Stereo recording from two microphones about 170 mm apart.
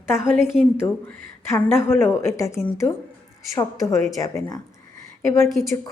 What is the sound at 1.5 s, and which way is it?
A woman's voice, 15° left (ahead or behind).